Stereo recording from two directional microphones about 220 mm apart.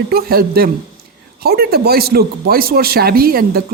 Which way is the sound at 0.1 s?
45° right (ahead or behind).